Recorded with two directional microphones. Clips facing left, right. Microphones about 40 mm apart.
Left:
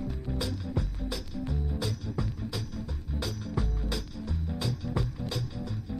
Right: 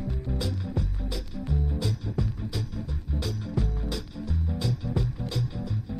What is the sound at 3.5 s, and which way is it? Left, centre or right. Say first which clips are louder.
Music: right 2 dB; centre.